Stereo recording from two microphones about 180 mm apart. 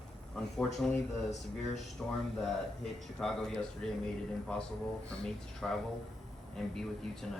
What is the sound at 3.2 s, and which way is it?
Speech, centre (ahead or behind).